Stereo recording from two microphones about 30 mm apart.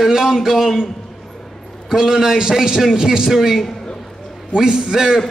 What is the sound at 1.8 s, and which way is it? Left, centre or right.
A man's voice, right.